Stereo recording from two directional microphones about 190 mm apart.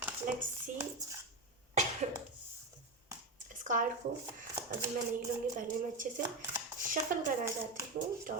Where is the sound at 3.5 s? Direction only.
45° right (ahead or behind).